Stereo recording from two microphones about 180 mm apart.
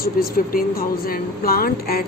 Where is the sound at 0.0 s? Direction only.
55° left (ahead or behind).